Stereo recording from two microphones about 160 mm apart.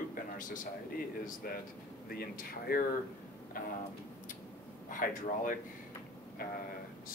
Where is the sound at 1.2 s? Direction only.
65° left (ahead or behind).